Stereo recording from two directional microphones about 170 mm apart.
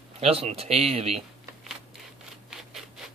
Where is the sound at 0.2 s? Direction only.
35° right (ahead or behind).